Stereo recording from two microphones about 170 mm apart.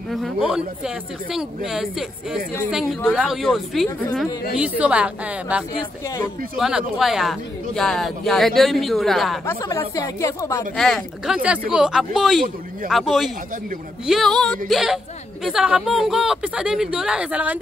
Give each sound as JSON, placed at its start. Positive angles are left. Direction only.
{"t": 0.1, "sound": "a woman's voice", "side_deg": 0}
{"t": 9.5, "sound": "speech", "side_deg": 15}
{"t": 10.8, "sound": "speech", "side_deg": 0}